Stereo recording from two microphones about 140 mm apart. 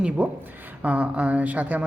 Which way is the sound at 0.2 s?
10° right (ahead or behind).